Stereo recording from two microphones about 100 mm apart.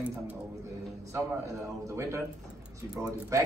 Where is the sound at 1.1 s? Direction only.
30° right (ahead or behind).